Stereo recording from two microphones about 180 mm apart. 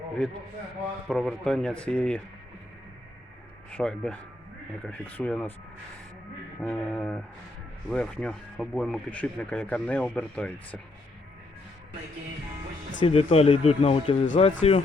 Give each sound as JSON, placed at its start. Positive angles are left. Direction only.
{"t": 1.0, "sound": "speech", "side_deg": 0}
{"t": 3.7, "sound": "speech", "side_deg": 5}
{"t": 6.6, "sound": "speech", "side_deg": 5}
{"t": 13.0, "sound": "speech", "side_deg": 30}